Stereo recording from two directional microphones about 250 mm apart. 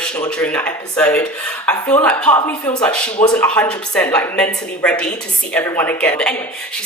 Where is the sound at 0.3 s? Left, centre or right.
Centre.